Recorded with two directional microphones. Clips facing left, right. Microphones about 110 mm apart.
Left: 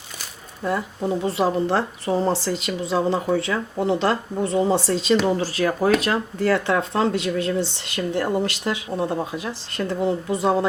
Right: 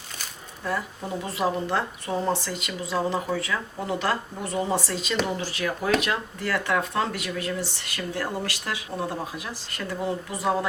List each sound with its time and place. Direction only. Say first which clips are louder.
1.2 s speech: left 4 dB; 30° left (ahead or behind)